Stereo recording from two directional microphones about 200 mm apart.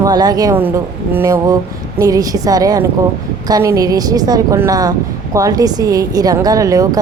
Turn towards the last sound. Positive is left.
turn(degrees=-15)  # may be behind; listen again after turning